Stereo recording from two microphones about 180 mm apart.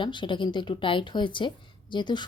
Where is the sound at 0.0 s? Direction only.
25° left (ahead or behind).